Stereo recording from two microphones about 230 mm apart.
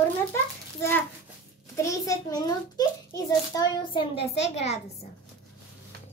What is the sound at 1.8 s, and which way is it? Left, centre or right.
A child's voice, centre.